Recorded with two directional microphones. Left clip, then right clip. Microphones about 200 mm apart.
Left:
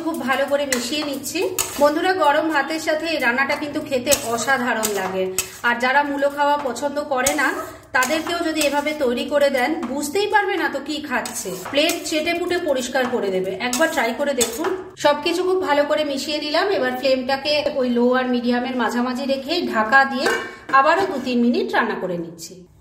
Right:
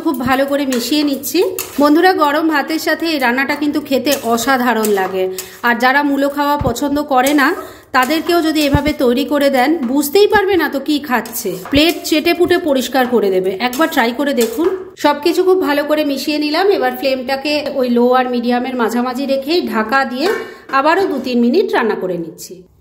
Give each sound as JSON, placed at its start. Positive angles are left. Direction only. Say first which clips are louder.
{"t": 0.3, "sound": "a woman's voice", "louder": "right 4 dB", "side_deg": -50}
{"t": 15.0, "sound": "a woman's voice", "louder": "right 6 dB", "side_deg": -35}